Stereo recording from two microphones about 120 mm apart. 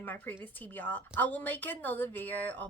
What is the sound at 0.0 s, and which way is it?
A woman's voice, 15° left (ahead or behind).